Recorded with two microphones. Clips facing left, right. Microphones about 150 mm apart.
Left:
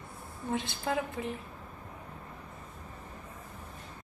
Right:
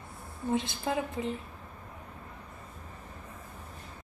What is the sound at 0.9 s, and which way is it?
Speech, 15° right (ahead or behind).